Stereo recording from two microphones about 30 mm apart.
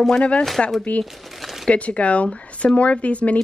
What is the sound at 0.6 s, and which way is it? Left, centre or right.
Speech, left.